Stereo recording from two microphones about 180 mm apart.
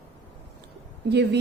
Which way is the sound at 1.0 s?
70° right (ahead or behind).